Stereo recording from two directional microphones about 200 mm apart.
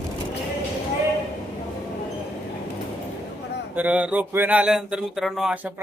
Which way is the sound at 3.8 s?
5° right (ahead or behind).